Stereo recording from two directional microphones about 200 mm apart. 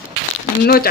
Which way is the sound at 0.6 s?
50° left (ahead or behind).